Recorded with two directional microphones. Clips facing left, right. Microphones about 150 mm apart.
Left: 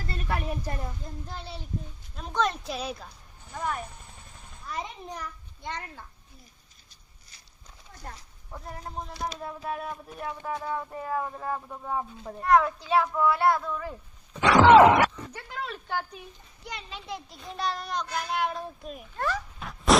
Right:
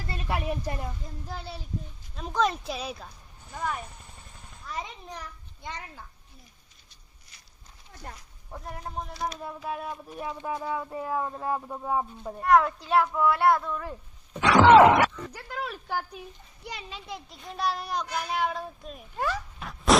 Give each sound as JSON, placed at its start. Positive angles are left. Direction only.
{"t": 0.1, "sound": "a woman's voice", "side_deg": -15}
{"t": 1.3, "sound": "speech", "side_deg": 0}
{"t": 5.6, "sound": "speech", "side_deg": 0}
{"t": 9.4, "sound": "speech", "side_deg": 0}
{"t": 10.2, "sound": "speech", "side_deg": -15}
{"t": 19.1, "sound": "cat", "side_deg": 0}